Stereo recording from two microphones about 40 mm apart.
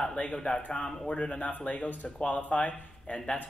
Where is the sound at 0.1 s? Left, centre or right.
Left.